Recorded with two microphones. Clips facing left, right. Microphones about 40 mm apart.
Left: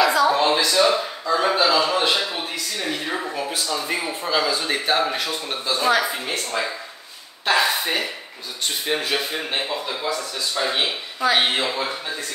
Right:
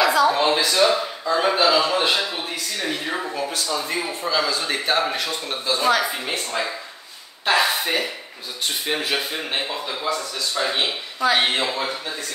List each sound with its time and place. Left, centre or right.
0.0 s a man's voice: centre